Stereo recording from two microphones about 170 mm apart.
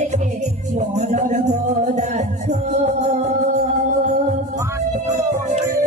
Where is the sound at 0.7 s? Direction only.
45° right (ahead or behind).